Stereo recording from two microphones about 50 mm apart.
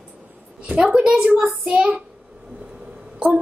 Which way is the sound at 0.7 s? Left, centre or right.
Centre.